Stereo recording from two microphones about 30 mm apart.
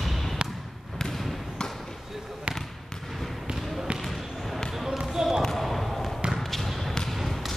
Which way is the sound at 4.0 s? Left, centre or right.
Centre.